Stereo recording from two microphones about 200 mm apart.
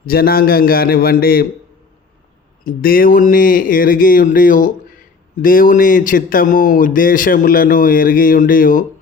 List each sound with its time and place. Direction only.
0.0 s speech: 50° left (ahead or behind)
2.6 s speech: 45° left (ahead or behind)